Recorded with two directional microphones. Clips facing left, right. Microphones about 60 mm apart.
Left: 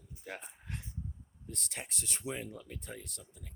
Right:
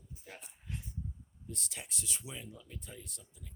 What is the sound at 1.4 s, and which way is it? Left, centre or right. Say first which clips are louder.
Speech: left 2 dB; left.